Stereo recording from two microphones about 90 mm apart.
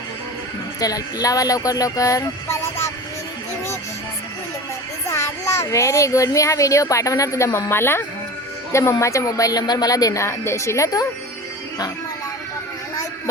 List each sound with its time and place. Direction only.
0.8 s speech: 45° left (ahead or behind)
2.5 s speech: 25° left (ahead or behind)
5.0 s speech: 30° left (ahead or behind)
10.2 s speech: 30° left (ahead or behind)